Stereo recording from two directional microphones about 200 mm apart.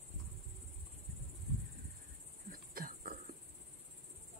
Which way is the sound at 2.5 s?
45° right (ahead or behind).